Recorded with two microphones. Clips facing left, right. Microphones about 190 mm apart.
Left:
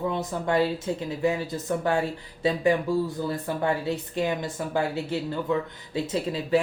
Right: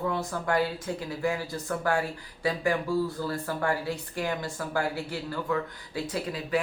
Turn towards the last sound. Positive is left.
turn(degrees=25)  # may be behind; listen again after turning